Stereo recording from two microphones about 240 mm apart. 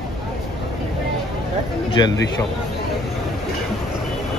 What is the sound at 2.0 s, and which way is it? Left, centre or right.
Speech, centre.